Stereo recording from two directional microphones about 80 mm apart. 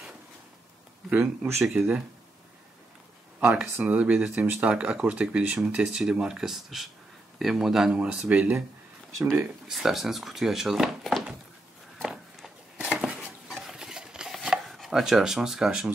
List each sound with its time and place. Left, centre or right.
1.1 s speech: centre
3.7 s speech: centre
9.7 s speech: centre
12.0 s a sound: centre